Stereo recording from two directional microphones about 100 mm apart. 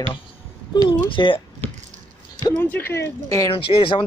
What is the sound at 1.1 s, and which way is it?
Speech, 55° left (ahead or behind).